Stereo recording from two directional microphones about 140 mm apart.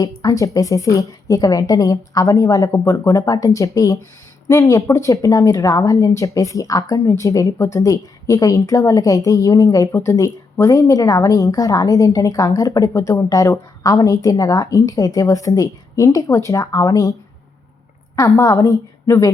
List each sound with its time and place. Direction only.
0.0 s speech: 25° left (ahead or behind)
18.2 s speech: 20° left (ahead or behind)